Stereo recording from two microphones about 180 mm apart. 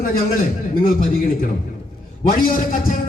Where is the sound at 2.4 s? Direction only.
50° left (ahead or behind).